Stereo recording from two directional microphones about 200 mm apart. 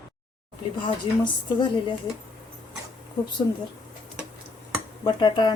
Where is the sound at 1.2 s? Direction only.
25° left (ahead or behind).